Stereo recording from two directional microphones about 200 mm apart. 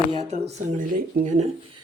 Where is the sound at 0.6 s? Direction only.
40° right (ahead or behind).